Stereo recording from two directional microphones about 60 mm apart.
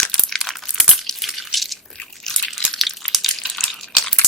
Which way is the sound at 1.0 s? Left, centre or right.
Centre.